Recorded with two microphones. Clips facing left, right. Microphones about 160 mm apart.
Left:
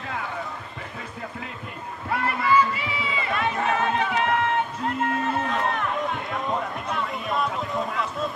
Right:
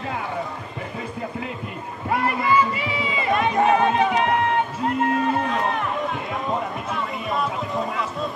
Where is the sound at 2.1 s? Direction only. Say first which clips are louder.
Right 3 dB; 15° right (ahead or behind).